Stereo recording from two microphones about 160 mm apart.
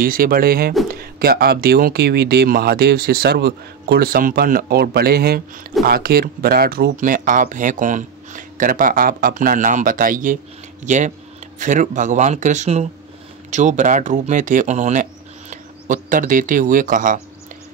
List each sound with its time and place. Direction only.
0.0 s speech: 65° right (ahead or behind); by 15.0 s 45° right (ahead or behind)
15.5 s speech: 55° right (ahead or behind)